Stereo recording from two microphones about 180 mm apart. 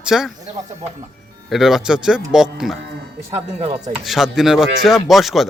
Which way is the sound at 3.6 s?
35° right (ahead or behind).